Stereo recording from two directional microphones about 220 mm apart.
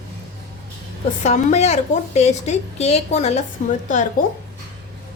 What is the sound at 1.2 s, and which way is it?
A woman's voice, 30° left (ahead or behind).